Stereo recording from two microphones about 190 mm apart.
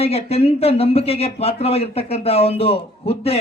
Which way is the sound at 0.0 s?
30° left (ahead or behind).